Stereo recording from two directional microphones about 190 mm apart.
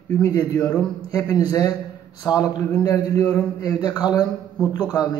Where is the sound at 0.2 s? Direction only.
20° left (ahead or behind).